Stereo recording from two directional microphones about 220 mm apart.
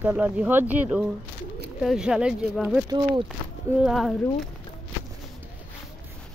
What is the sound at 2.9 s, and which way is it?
Speech, 20° right (ahead or behind).